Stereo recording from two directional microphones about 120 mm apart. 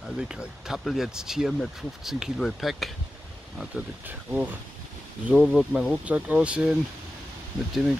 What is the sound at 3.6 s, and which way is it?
Speech, 10° right (ahead or behind).